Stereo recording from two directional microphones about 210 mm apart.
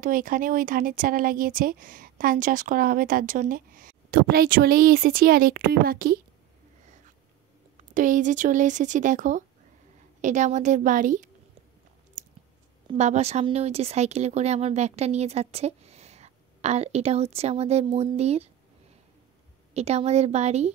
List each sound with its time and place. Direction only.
0.0 s speech: 40° right (ahead or behind)
7.9 s speech: 40° right (ahead or behind)
12.2 s a sound: 35° right (ahead or behind)
12.8 s speech: 30° right (ahead or behind)
19.7 s speech: 30° right (ahead or behind)